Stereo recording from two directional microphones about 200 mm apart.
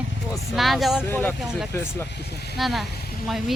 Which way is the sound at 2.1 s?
55° left (ahead or behind).